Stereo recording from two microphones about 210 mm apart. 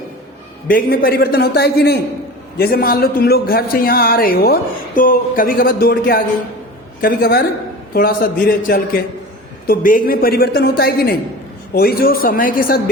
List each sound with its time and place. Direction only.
0.7 s speech: 45° left (ahead or behind)